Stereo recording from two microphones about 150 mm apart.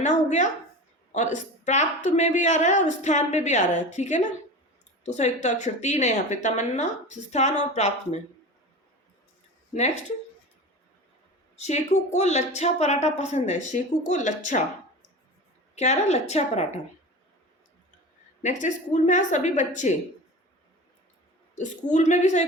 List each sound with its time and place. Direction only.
0.0 s a woman's voice: 55° left (ahead or behind)
11.5 s a woman's voice: 50° left (ahead or behind)
15.7 s a woman's voice: 50° left (ahead or behind)
18.4 s speech: 55° left (ahead or behind)
21.9 s a woman's voice: 50° left (ahead or behind)